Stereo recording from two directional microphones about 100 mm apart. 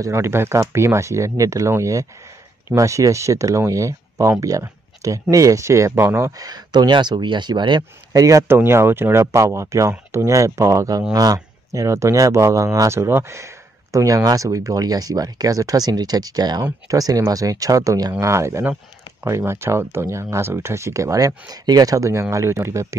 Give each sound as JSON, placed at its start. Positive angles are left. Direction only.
{"t": 0.0, "sound": "speech", "side_deg": -25}
{"t": 6.4, "sound": "speech", "side_deg": -40}